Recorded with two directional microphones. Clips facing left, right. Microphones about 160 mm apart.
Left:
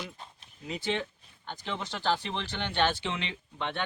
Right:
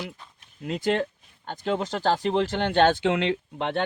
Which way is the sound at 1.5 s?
45° right (ahead or behind).